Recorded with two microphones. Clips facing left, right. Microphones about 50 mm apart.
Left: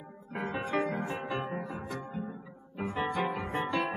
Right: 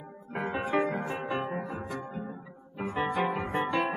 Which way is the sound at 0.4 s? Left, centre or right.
Centre.